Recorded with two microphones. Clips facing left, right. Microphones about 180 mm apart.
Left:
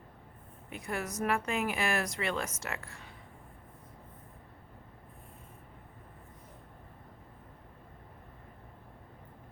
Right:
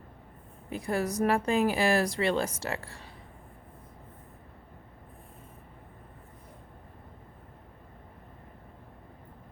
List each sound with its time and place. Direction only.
0.7 s a woman's voice: 35° right (ahead or behind)